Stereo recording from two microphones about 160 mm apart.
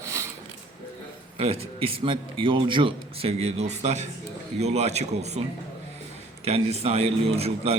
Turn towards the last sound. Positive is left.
turn(degrees=-40)  # may be behind; listen again after turning